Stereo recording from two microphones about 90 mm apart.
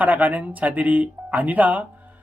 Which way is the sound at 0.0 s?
20° right (ahead or behind).